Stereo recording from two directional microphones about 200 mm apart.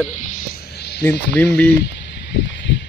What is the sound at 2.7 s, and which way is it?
Heart sounds, 65° left (ahead or behind).